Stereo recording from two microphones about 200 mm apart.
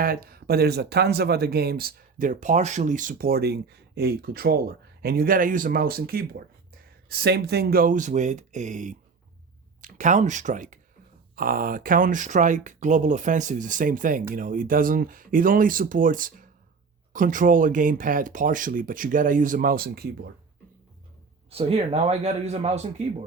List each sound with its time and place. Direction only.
0.0 s speech: 50° right (ahead or behind)
21.5 s speech: 30° right (ahead or behind)